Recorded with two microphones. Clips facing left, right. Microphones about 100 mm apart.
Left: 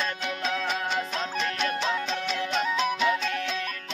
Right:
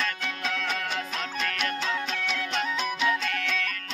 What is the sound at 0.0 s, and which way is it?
Music, 25° left (ahead or behind).